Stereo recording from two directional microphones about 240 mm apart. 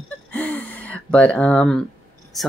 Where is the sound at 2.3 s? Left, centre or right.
Centre.